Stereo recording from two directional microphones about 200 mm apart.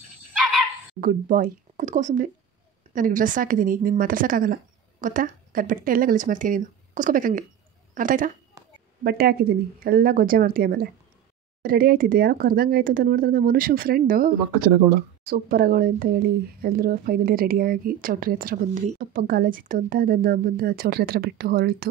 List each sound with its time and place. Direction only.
1.0 s a woman's voice: 40° right (ahead or behind)
8.6 s a sound: 15° right (ahead or behind)
9.0 s speech: 50° right (ahead or behind)